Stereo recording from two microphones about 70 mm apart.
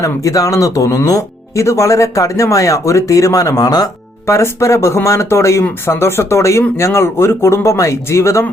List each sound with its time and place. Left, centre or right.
0.0 s speech: left
1.6 s speech: left
4.3 s speech: left